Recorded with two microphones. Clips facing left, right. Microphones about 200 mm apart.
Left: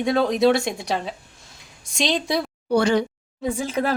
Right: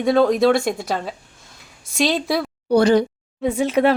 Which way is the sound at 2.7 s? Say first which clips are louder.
Right 4 dB; 35° right (ahead or behind).